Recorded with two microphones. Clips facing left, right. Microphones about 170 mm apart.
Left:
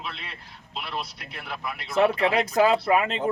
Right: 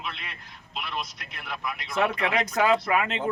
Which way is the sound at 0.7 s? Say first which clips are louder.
Left 1 dB; 30° left (ahead or behind).